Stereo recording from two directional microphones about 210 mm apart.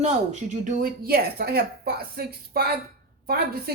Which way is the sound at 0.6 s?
45° right (ahead or behind).